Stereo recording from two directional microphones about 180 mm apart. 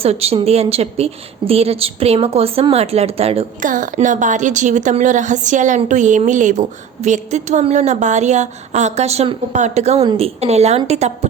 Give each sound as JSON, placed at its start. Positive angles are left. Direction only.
{"t": 0.0, "sound": "speech", "side_deg": -35}
{"t": 3.6, "sound": "a woman's voice", "side_deg": -45}